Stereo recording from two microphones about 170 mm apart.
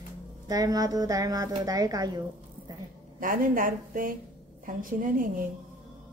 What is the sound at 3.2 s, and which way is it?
A woman's voice, 55° right (ahead or behind).